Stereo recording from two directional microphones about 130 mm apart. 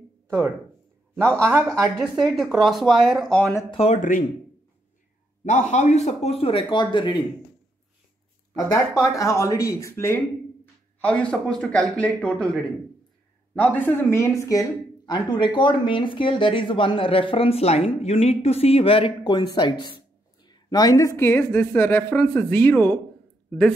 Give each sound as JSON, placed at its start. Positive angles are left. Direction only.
{"t": 1.4, "sound": "speech", "side_deg": -20}
{"t": 2.0, "sound": "speech", "side_deg": 0}
{"t": 3.7, "sound": "a man's voice", "side_deg": 50}
{"t": 5.4, "sound": "a man's voice", "side_deg": 65}
{"t": 8.5, "sound": "speech", "side_deg": 25}
{"t": 20.4, "sound": "a sound", "side_deg": 30}
{"t": 21.2, "sound": "speech", "side_deg": 15}